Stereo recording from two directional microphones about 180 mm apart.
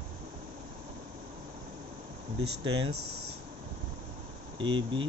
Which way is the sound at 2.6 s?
30° right (ahead or behind).